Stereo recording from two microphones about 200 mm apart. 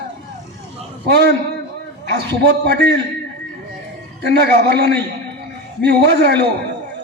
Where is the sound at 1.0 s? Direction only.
55° right (ahead or behind).